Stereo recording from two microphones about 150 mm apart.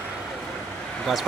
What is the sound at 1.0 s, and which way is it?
Speech, centre (ahead or behind).